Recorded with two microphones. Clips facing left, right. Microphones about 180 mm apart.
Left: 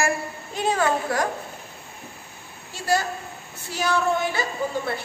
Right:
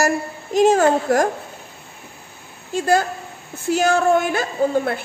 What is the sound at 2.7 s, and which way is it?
Speech, 50° right (ahead or behind).